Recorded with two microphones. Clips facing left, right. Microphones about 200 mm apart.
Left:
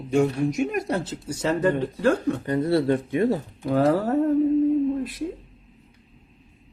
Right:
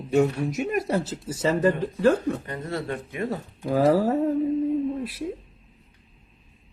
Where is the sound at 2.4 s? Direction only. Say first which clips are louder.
Left 10 dB; 35° left (ahead or behind).